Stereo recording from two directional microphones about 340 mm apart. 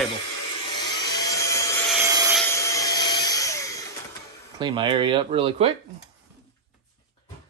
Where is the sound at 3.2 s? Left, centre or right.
Centre.